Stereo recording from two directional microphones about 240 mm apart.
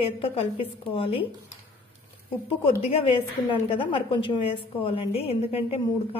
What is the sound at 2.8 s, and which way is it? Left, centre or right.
A woman's voice, left.